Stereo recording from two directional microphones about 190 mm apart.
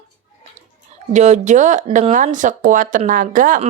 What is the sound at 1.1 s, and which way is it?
Speech, 40° right (ahead or behind).